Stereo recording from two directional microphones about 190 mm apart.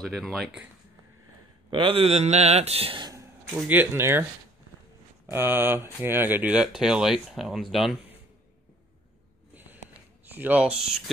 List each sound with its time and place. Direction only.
0.0 s speech: centre (ahead or behind)
1.7 s a man's voice: 25° right (ahead or behind)
3.5 s speech: 10° right (ahead or behind)
9.5 s a sound: 10° right (ahead or behind)
10.2 s speech: 10° right (ahead or behind)